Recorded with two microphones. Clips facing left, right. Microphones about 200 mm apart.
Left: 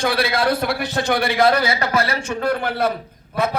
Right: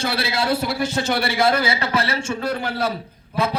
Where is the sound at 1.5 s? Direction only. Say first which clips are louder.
Left 2 dB; 30° right (ahead or behind).